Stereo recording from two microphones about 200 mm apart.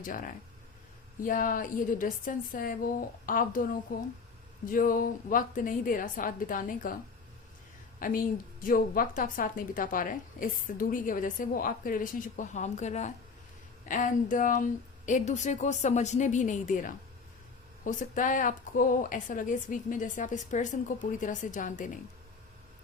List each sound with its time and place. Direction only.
0.0 s a woman's voice: 45° left (ahead or behind)
7.9 s a woman's voice: 45° left (ahead or behind)